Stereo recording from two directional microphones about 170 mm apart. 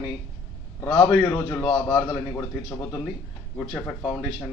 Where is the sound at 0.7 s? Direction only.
15° left (ahead or behind).